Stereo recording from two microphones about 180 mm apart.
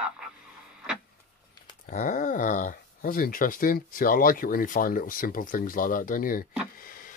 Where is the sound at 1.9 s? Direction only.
45° left (ahead or behind).